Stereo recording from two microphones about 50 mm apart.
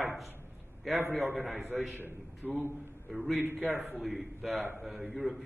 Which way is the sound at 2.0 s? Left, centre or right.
Right.